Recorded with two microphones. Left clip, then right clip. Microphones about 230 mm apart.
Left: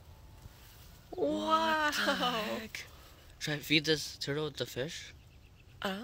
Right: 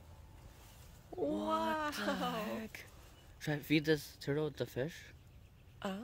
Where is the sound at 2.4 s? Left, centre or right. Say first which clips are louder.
Left 5 dB; right.